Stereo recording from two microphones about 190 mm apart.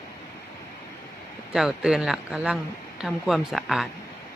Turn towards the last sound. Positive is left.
turn(degrees=0)  # may be behind; listen again after turning